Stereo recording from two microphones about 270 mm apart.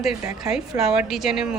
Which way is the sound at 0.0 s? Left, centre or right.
Centre.